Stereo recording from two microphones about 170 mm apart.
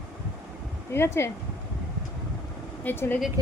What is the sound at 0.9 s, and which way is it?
Speech, 15° left (ahead or behind).